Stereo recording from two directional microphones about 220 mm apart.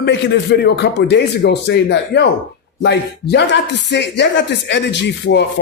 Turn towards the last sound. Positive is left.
turn(degrees=50)  # may be behind; listen again after turning